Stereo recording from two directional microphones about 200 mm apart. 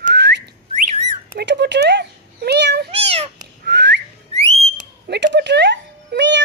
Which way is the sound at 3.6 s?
60° right (ahead or behind).